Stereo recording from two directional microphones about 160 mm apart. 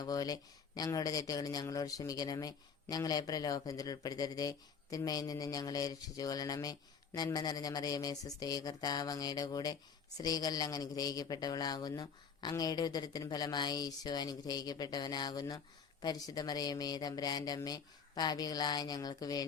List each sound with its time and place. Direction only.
0.0 s speech: 25° left (ahead or behind)